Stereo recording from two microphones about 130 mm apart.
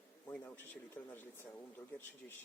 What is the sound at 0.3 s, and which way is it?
Speech, 15° left (ahead or behind).